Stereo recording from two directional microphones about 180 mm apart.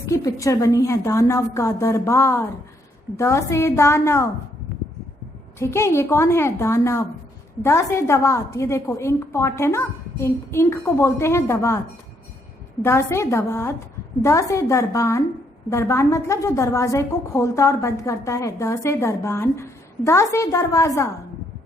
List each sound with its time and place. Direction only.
0.0 s a woman's voice: 15° left (ahead or behind)
5.5 s a woman's voice: 15° left (ahead or behind)
12.8 s a woman's voice: 15° left (ahead or behind)